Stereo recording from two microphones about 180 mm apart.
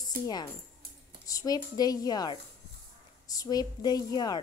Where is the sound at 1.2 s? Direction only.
20° left (ahead or behind).